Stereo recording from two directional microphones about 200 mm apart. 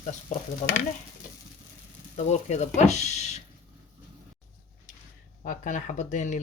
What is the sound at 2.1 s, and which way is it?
Speech, 35° left (ahead or behind).